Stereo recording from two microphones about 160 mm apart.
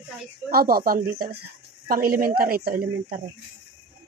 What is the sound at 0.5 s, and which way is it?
A woman's voice, 65° right (ahead or behind).